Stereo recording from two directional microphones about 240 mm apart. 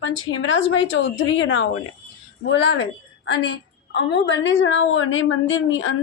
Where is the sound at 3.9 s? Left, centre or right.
Left.